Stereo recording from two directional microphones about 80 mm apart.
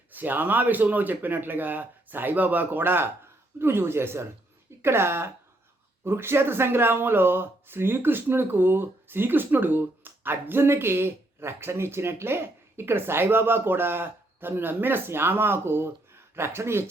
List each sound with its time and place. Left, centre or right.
0.1 s speech: right